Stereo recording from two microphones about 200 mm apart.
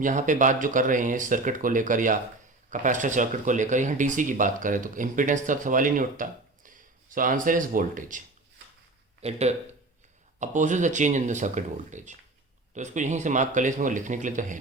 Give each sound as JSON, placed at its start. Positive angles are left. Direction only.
{"t": 0.0, "sound": "speech", "side_deg": -40}
{"t": 9.2, "sound": "speech", "side_deg": -35}